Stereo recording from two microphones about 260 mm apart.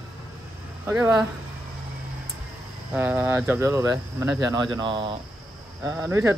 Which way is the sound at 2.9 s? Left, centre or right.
Centre.